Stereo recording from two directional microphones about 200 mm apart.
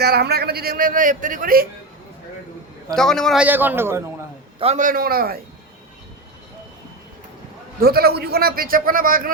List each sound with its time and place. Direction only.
0.0 s a man's voice: 55° right (ahead or behind)
2.9 s a man's voice: centre (ahead or behind)
4.6 s a man's voice: 35° right (ahead or behind)
7.8 s a man's voice: 50° right (ahead or behind)